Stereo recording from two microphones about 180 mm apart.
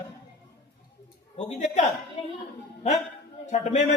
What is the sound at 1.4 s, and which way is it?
Speech, 40° left (ahead or behind).